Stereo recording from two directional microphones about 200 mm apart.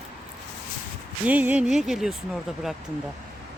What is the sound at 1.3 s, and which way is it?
Speech, 5° right (ahead or behind).